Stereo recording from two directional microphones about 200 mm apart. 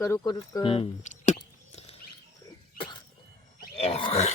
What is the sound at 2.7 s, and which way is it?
Rodents, 25° left (ahead or behind).